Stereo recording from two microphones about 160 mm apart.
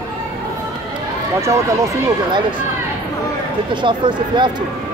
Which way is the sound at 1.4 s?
20° right (ahead or behind).